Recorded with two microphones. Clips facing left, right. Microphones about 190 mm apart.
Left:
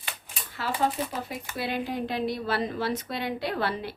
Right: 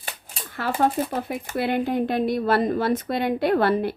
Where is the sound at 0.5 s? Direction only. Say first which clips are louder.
Right 5 dB; 55° right (ahead or behind).